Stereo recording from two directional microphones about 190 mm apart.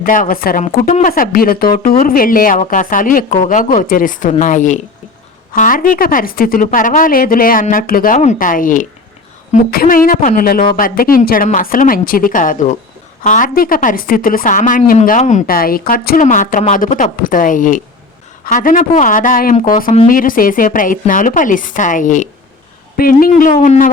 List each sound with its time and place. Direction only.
0.0 s a woman's voice: 45° left (ahead or behind)